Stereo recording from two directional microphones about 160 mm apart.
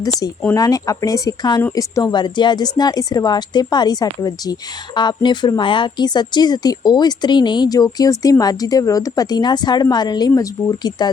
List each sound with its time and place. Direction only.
0.0 s speech: 25° left (ahead or behind)